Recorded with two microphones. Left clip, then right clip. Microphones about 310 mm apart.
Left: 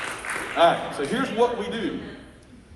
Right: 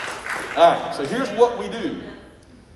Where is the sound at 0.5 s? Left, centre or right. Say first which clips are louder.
Right 4 dB; right.